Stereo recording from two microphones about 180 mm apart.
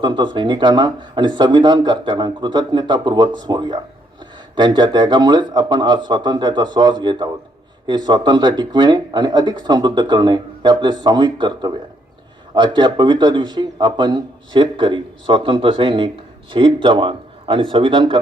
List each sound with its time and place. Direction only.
0.0 s speech: 25° right (ahead or behind)